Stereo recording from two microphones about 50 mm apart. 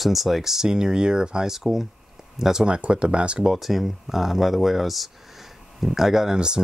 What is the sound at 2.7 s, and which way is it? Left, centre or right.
Speech, right.